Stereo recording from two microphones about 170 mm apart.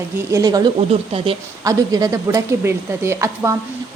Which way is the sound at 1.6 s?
20° right (ahead or behind).